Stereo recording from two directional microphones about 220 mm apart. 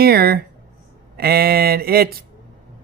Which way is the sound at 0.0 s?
45° right (ahead or behind).